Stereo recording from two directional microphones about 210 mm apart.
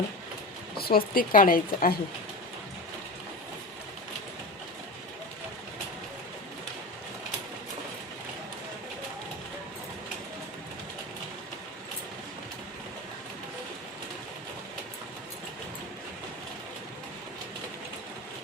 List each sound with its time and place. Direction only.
0.8 s speech: 45° left (ahead or behind)